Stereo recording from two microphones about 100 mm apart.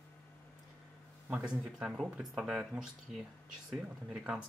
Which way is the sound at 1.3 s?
10° right (ahead or behind).